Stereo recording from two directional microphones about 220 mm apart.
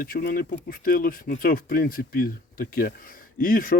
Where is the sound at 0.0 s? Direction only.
40° left (ahead or behind).